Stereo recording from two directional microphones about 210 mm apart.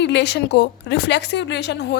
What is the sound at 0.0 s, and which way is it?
Speech, 55° left (ahead or behind).